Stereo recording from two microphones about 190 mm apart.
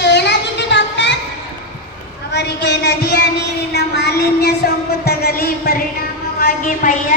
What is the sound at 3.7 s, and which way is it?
Music, 60° left (ahead or behind).